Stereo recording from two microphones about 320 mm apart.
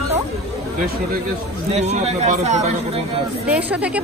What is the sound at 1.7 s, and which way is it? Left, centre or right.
Speech, right.